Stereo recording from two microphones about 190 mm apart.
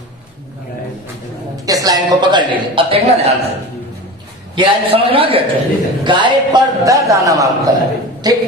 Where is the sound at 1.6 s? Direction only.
20° right (ahead or behind).